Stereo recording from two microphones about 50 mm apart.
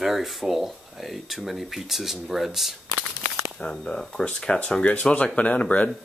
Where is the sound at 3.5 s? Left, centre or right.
Centre.